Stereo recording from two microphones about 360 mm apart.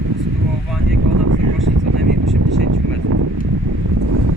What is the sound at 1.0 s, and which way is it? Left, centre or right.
Vehicle, right.